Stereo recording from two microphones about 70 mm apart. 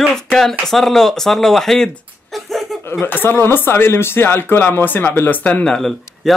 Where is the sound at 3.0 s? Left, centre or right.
Left.